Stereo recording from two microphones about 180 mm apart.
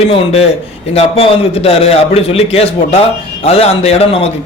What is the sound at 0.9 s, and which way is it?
A man's voice, 35° left (ahead or behind).